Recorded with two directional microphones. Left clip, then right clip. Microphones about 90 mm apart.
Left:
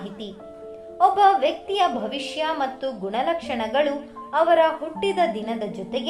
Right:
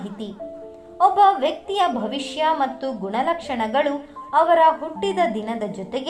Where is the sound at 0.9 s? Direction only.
40° right (ahead or behind).